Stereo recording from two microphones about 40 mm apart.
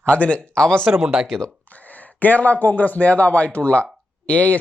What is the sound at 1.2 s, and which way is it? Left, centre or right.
Speech, centre.